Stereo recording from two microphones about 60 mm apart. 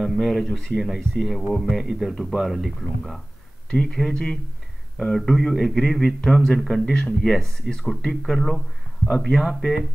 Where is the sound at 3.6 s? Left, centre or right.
Centre.